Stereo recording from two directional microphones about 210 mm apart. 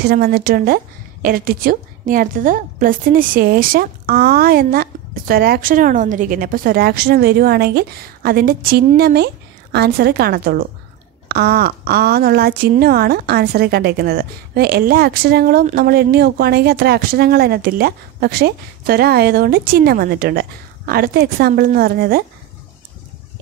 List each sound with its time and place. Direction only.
0.0 s speech: 45° right (ahead or behind)